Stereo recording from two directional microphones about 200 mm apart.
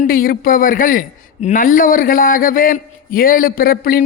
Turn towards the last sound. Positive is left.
turn(degrees=45)  # may be behind; listen again after turning